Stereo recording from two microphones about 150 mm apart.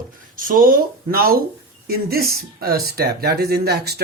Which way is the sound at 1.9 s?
90° right.